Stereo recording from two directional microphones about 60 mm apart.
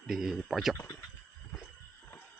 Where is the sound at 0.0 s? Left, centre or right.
Centre.